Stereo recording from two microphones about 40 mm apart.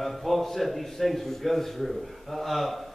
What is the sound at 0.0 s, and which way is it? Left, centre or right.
A man's voice, centre.